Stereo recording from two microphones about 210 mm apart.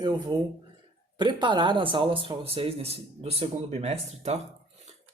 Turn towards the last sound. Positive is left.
turn(degrees=-30)  # may be behind; listen again after turning